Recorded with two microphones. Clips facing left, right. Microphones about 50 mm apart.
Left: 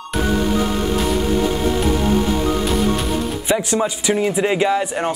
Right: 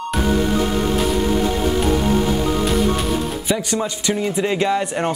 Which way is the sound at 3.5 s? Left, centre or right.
Centre.